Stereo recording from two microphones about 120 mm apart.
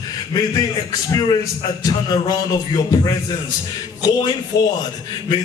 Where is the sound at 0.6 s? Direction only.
30° left (ahead or behind).